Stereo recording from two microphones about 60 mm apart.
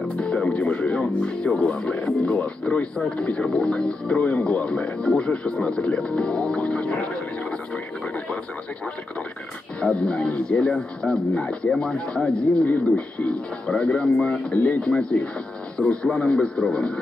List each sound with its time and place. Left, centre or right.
0.2 s speech: centre
9.8 s speech: centre
14.5 s speech: left
14.9 s speech: centre